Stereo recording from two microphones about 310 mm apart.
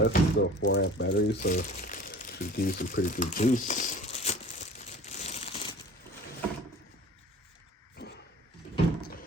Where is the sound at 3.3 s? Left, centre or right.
Left.